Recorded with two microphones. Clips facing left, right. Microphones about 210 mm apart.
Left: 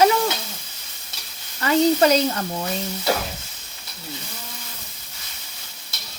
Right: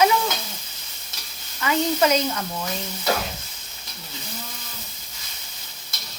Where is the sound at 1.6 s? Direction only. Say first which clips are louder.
Left 4 dB; 35° left (ahead or behind).